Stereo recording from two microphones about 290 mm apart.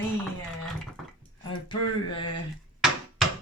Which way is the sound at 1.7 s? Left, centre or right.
Centre.